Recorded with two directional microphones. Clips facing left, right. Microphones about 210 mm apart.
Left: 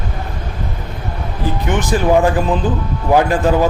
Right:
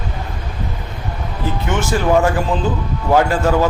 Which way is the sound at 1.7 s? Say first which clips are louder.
Left 2 dB; 15° left (ahead or behind).